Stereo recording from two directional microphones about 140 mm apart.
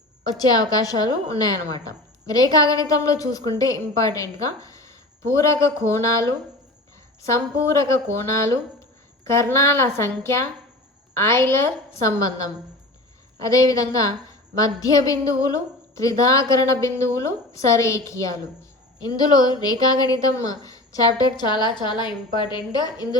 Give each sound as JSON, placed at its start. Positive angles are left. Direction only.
{"t": 0.3, "sound": "a woman's voice", "side_deg": 25}
{"t": 13.4, "sound": "a woman's voice", "side_deg": 25}